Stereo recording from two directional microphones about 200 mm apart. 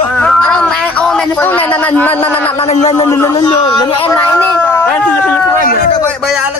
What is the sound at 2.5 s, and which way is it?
Speech, 30° left (ahead or behind).